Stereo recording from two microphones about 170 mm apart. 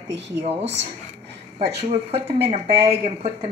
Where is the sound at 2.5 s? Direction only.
40° right (ahead or behind).